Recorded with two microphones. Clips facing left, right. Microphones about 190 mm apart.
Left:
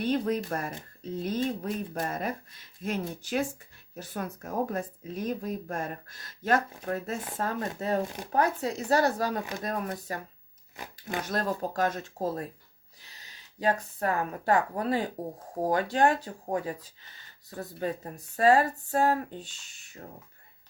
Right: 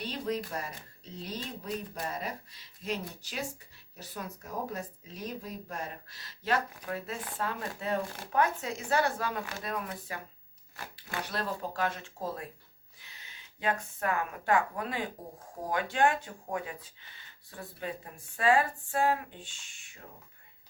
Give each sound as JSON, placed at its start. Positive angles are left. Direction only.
{"t": 0.0, "sound": "speech", "side_deg": 55}
{"t": 8.0, "sound": "speech", "side_deg": 20}
{"t": 8.3, "sound": "a woman's voice", "side_deg": 35}